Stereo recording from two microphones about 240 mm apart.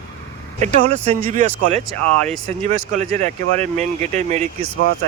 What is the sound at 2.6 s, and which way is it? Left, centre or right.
Speech, right.